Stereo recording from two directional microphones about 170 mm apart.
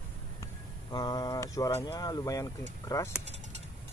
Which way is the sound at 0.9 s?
25° left (ahead or behind).